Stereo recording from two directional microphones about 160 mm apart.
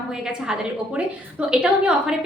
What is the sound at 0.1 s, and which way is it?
A woman's voice, 5° right (ahead or behind).